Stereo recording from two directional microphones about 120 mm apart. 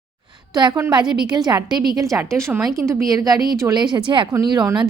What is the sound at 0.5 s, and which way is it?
A woman's voice, 35° right (ahead or behind).